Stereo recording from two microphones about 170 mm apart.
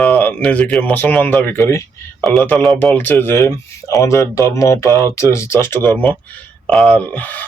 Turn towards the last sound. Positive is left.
turn(degrees=10)  # may be behind; listen again after turning